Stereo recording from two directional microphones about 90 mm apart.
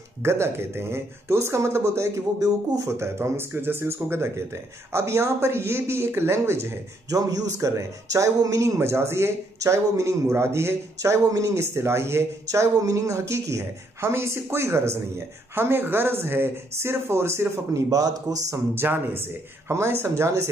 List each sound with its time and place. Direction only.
0.2 s speech: 30° right (ahead or behind)
7.2 s speech: 40° right (ahead or behind)
18.8 s speech: 25° right (ahead or behind)